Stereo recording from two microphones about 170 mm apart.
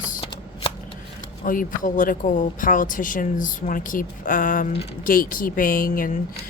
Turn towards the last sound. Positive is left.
turn(degrees=55)  # may be behind; listen again after turning